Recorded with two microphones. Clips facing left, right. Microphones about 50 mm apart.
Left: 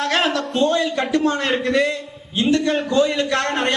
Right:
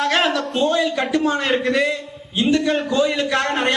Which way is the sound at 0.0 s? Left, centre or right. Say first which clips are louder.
Right 1 dB; centre.